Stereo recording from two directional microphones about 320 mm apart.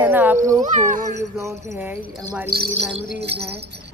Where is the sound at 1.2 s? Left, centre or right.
Centre.